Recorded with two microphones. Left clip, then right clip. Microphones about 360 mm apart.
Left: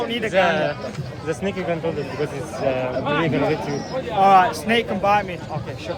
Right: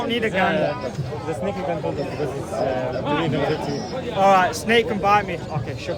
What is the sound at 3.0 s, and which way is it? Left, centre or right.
Speech, centre.